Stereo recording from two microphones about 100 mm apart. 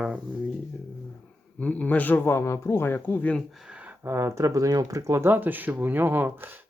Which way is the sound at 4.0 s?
25° right (ahead or behind).